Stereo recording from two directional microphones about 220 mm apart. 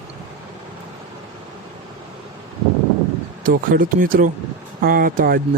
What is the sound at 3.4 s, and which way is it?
Speech, 40° right (ahead or behind).